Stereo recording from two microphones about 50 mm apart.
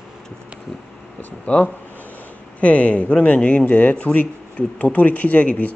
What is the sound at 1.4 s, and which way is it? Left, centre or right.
Speech, left.